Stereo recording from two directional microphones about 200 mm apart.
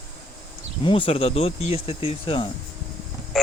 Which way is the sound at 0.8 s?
25° left (ahead or behind).